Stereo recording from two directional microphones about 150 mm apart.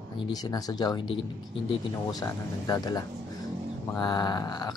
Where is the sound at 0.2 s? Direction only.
25° left (ahead or behind).